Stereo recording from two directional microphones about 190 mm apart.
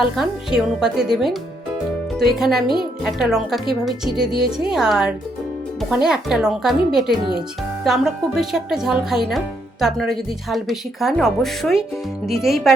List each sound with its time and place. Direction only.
0.2 s a woman's voice: 5° right (ahead or behind)